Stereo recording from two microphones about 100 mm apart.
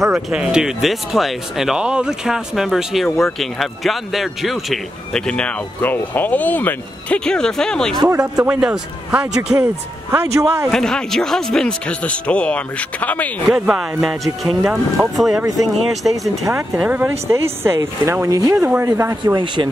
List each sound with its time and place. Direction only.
0.1 s a man's voice: 10° right (ahead or behind); by 8.0 s 5° left (ahead or behind)
8.1 s speech: 35° right (ahead or behind)
8.5 s a man's voice: 10° right (ahead or behind)
10.1 s speech: 25° right (ahead or behind)
10.7 s a man's voice: 5° left (ahead or behind)
13.5 s speech: 5° right (ahead or behind)
14.6 s a man's voice: 15° right (ahead or behind)
15.1 s speech: centre (ahead or behind)
16.1 s speech: 30° right (ahead or behind)
16.7 s a man's voice: 15° right (ahead or behind)
17.3 s speech: 25° right (ahead or behind)
19.3 s speech: 50° right (ahead or behind)